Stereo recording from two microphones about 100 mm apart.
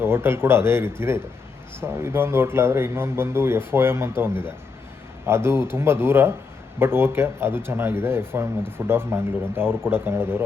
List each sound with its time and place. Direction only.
0.0 s speech: 25° right (ahead or behind)